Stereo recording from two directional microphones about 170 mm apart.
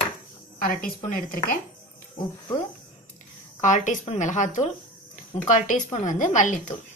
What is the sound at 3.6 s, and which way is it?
Speech, 45° left (ahead or behind).